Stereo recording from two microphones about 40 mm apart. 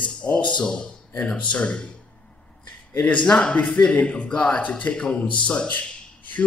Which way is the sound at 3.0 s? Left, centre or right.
Left.